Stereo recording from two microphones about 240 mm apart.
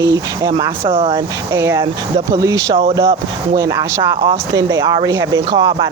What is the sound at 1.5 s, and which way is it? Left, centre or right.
Speech, centre.